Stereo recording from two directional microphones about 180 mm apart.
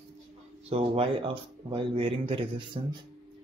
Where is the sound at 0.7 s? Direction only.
30° right (ahead or behind).